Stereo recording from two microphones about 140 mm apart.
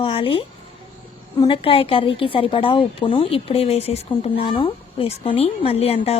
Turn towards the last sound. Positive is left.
turn(degrees=45)  # may be behind; listen again after turning